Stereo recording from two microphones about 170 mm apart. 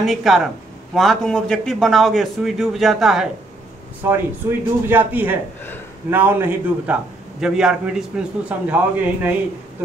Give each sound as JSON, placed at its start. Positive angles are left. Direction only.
{"t": 0.0, "sound": "a man's voice", "side_deg": 0}
{"t": 4.0, "sound": "a man's voice", "side_deg": -15}